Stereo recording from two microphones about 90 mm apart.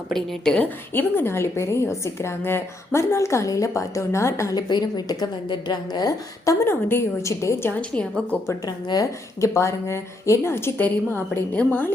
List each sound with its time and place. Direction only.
0.1 s a woman's voice: 10° left (ahead or behind)
0.9 s a woman's voice: 25° left (ahead or behind)
4.5 s speech: 50° left (ahead or behind)
6.7 s a woman's voice: 25° left (ahead or behind)
7.8 s a woman's voice: 15° left (ahead or behind)
8.6 s a woman's voice: 45° left (ahead or behind); by 11.9 s 20° left (ahead or behind)